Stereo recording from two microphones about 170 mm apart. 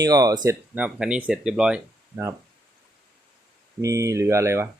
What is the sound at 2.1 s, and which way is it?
Speech, 15° right (ahead or behind).